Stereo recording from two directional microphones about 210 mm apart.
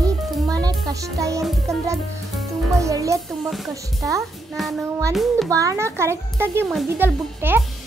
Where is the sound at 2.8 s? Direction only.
15° right (ahead or behind).